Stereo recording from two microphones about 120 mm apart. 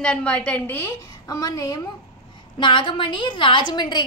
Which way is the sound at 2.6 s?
45° left (ahead or behind).